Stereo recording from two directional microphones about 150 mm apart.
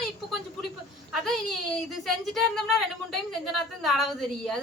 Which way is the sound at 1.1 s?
Centre (ahead or behind).